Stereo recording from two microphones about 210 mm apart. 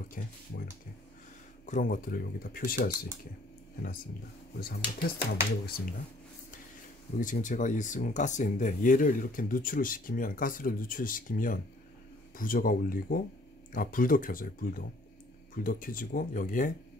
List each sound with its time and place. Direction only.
0.2 s speech: 40° left (ahead or behind)
1.7 s speech: 40° left (ahead or behind)
4.6 s speech: 45° left (ahead or behind)
7.2 s speech: 40° left (ahead or behind)